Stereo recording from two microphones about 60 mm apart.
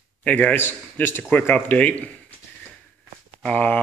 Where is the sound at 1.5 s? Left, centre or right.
Left.